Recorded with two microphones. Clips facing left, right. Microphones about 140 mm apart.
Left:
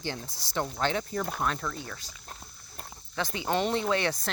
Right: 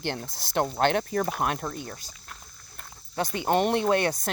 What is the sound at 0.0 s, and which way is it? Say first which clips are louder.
Speech: right 4 dB; 60° right (ahead or behind).